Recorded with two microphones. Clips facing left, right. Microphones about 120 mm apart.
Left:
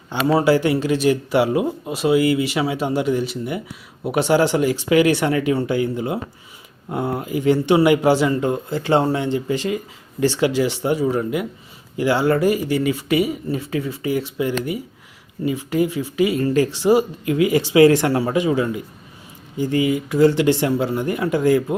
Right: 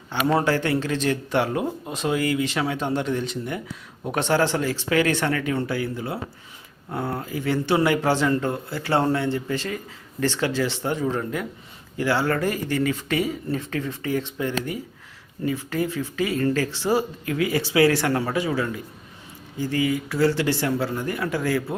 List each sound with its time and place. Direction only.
0.3 s speech: 5° left (ahead or behind)